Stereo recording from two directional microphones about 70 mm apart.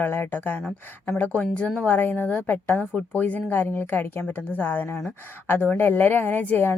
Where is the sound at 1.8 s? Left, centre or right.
Left.